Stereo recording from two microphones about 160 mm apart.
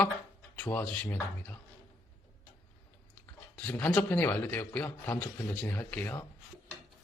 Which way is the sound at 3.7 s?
10° left (ahead or behind).